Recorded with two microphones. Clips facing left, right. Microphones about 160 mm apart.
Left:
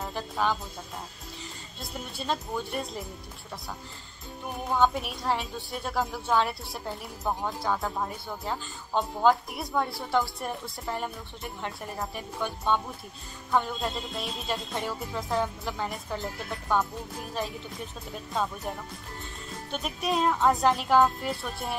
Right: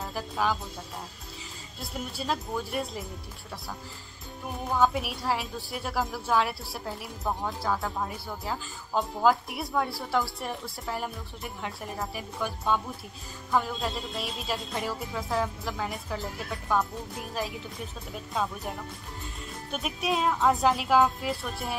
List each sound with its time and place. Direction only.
0.0 s speech: centre (ahead or behind)
1.8 s a woman's voice: centre (ahead or behind)
4.6 s a woman's voice: centre (ahead or behind)